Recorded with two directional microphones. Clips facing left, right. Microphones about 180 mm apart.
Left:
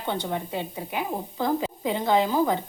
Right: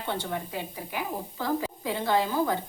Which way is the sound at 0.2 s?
20° left (ahead or behind).